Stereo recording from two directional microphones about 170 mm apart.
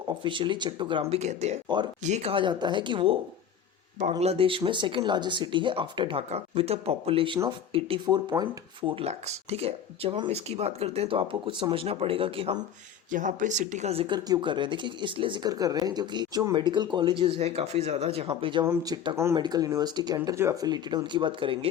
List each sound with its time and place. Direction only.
0.1 s speech: 30° right (ahead or behind)
1.2 s speech: 40° right (ahead or behind)
1.6 s speech: 25° right (ahead or behind)
2.0 s speech: 40° right (ahead or behind)
4.2 s speech: 35° right (ahead or behind)
8.9 s speech: 35° right (ahead or behind)
13.1 s speech: 50° right (ahead or behind); by 18.6 s 30° right (ahead or behind)
18.6 s speech: 20° right (ahead or behind)